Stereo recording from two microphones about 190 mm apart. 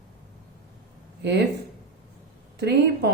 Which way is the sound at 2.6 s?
60° right (ahead or behind).